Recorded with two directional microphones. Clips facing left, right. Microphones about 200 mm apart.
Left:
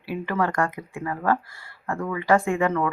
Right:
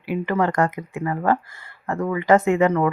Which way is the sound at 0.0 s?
15° right (ahead or behind).